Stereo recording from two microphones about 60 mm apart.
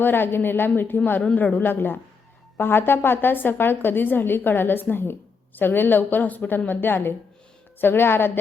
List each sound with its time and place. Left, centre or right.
0.0 s a woman's voice: left